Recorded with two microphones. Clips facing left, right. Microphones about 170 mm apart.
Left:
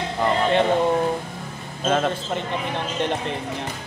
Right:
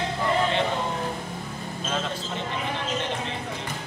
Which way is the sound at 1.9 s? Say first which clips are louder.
Left 9 dB; 55° left (ahead or behind).